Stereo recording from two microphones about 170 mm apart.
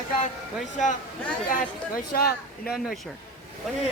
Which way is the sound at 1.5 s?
60° left (ahead or behind).